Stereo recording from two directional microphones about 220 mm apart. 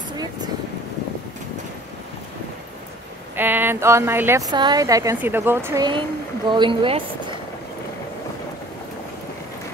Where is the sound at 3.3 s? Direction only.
10° right (ahead or behind).